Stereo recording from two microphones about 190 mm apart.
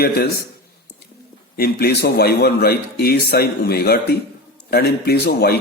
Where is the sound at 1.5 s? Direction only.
55° left (ahead or behind).